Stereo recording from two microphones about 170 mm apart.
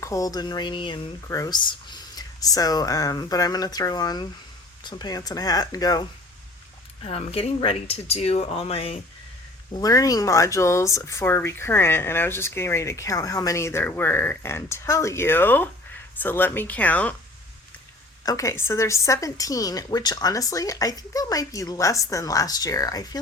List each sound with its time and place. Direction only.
0.0 s a woman's voice: 20° left (ahead or behind)
7.0 s speech: 35° left (ahead or behind)
9.7 s speech: 20° left (ahead or behind)
18.2 s a woman's voice: 20° left (ahead or behind)